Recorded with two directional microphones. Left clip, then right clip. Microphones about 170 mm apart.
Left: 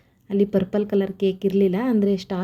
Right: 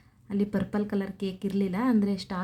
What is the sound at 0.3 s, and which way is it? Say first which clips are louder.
A woman's voice: left 10 dB; 10° left (ahead or behind).